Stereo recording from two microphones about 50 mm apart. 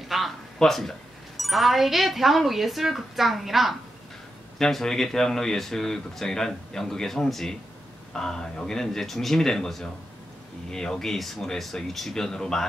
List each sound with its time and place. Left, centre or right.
0.1 s a sound: centre
0.6 s speech: centre
4.6 s speech: centre